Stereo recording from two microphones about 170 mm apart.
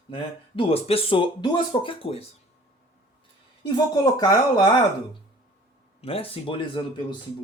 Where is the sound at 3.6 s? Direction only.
25° left (ahead or behind).